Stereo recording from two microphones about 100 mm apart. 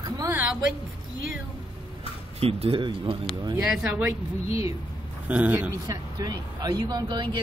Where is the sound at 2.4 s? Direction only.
75° right (ahead or behind).